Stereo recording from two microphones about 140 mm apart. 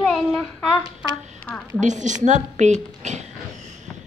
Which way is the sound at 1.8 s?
60° right (ahead or behind).